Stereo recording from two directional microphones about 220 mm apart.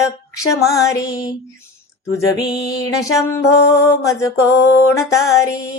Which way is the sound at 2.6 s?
15° left (ahead or behind).